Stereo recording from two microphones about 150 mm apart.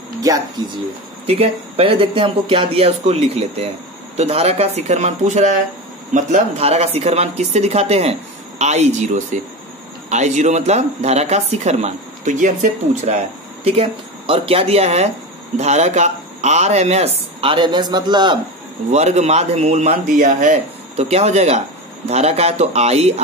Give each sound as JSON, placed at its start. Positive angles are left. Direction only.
{"t": 1.2, "sound": "speech", "side_deg": -40}
{"t": 13.7, "sound": "speech", "side_deg": -40}
{"t": 18.9, "sound": "speech", "side_deg": -50}